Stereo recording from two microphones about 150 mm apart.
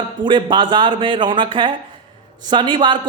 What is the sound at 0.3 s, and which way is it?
A woman's voice, 35° right (ahead or behind).